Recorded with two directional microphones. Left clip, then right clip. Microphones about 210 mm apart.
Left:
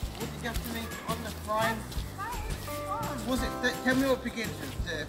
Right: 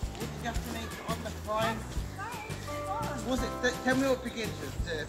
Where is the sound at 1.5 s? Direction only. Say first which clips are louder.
Left 2 dB; 15° left (ahead or behind).